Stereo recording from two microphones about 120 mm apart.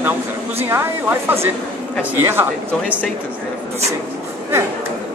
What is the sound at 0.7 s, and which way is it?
Speech, 20° right (ahead or behind).